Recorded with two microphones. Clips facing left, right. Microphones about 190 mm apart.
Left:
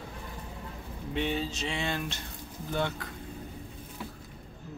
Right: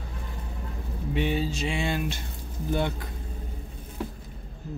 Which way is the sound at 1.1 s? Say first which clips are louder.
Right 4 dB; 10° right (ahead or behind).